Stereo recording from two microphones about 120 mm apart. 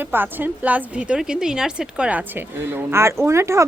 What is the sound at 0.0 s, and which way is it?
A woman's voice, 15° right (ahead or behind).